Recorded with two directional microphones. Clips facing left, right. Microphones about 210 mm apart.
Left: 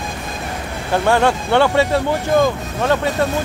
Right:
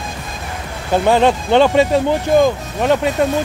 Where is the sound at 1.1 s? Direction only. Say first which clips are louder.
Right 3 dB; 20° right (ahead or behind).